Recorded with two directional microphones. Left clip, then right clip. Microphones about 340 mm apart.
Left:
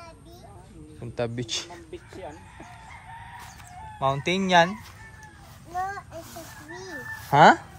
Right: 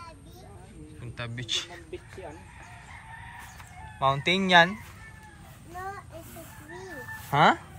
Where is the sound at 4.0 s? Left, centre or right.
Centre.